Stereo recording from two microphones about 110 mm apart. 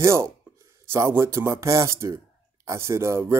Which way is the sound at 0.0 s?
25° right (ahead or behind).